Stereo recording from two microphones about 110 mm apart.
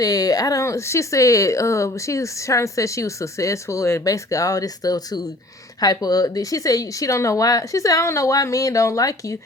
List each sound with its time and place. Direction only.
0.0 s speech: 35° left (ahead or behind)